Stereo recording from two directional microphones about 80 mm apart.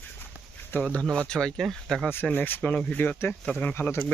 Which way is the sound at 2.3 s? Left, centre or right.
Left.